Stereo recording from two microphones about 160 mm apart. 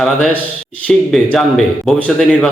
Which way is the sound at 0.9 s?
5° left (ahead or behind).